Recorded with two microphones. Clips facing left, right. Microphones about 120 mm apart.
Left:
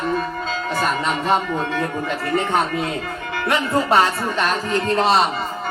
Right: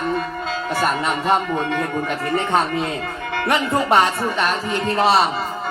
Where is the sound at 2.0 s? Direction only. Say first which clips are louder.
Even; 20° right (ahead or behind).